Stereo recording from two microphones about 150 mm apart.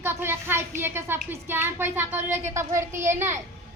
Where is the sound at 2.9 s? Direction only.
55° right (ahead or behind).